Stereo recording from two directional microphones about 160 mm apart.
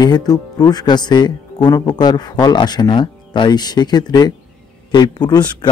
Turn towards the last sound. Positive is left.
turn(degrees=25)  # may be behind; listen again after turning